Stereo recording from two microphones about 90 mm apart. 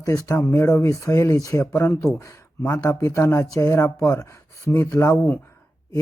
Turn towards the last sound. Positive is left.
turn(degrees=35)  # may be behind; listen again after turning